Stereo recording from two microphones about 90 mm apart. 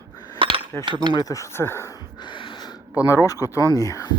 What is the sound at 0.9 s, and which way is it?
Speech, 55° right (ahead or behind).